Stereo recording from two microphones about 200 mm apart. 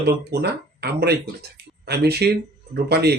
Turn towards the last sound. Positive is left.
turn(degrees=-55)  # may be behind; listen again after turning